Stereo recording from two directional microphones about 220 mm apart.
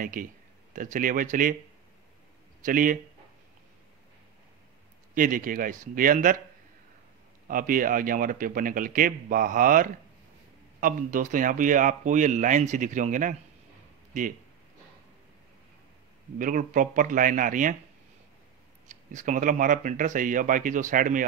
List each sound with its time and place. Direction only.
0.0 s speech: 40° right (ahead or behind)
2.6 s speech: 40° right (ahead or behind)
5.1 s speech: 40° right (ahead or behind)
7.4 s speech: 40° right (ahead or behind)
16.3 s speech: 35° right (ahead or behind)
18.9 s speech: 35° right (ahead or behind)